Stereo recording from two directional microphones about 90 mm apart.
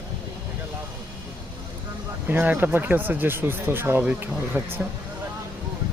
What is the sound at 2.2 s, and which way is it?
Speech, 20° right (ahead or behind).